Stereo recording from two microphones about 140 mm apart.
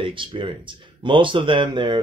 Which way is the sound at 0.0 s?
35° right (ahead or behind).